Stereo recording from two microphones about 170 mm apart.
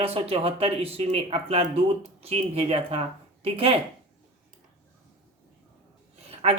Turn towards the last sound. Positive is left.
turn(degrees=-35)  # may be behind; listen again after turning